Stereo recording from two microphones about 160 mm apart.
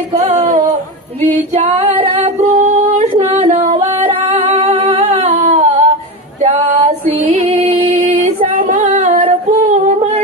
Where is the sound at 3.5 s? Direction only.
40° right (ahead or behind).